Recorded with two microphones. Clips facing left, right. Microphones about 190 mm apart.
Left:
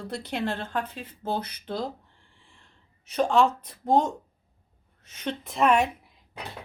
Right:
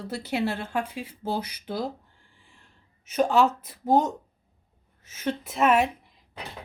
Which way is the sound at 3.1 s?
5° right (ahead or behind).